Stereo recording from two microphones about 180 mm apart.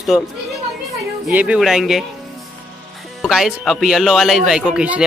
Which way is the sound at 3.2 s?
Centre (ahead or behind).